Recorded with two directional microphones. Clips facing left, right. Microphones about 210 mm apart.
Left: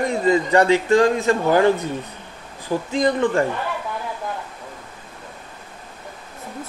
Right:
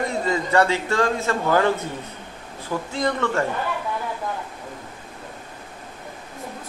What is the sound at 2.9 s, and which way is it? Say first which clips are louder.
Speech: left 5 dB; 15° left (ahead or behind).